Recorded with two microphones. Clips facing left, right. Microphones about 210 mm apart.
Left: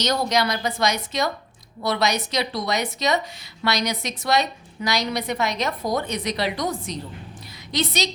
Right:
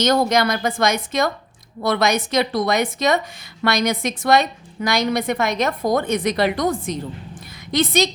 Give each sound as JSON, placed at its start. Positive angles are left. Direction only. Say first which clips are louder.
{"t": 0.0, "sound": "a woman's voice", "louder": "right 5 dB", "side_deg": -50}